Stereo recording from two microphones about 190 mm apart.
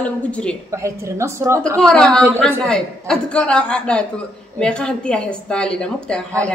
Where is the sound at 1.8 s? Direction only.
5° left (ahead or behind).